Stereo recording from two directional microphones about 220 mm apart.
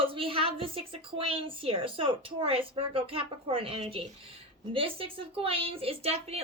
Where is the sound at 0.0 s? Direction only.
25° right (ahead or behind).